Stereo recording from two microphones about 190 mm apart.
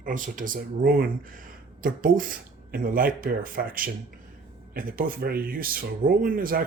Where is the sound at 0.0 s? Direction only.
45° right (ahead or behind).